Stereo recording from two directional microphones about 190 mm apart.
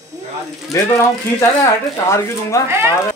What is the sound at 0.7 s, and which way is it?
Speech, 15° left (ahead or behind).